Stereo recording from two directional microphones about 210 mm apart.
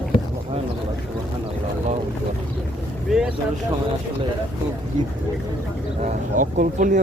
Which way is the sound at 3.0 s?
Centre (ahead or behind).